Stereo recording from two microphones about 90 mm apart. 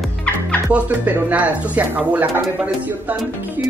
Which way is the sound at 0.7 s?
20° right (ahead or behind).